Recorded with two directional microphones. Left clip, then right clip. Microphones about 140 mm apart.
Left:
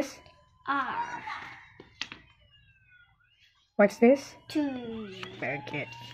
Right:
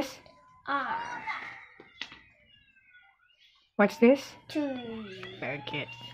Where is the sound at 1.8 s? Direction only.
50° left (ahead or behind).